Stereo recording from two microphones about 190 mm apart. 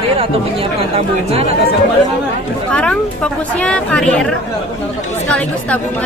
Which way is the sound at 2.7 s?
5° left (ahead or behind).